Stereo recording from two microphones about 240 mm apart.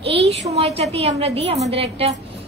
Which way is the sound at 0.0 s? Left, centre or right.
Right.